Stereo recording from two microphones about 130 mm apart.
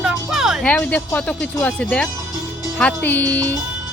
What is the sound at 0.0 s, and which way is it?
Music, 5° right (ahead or behind).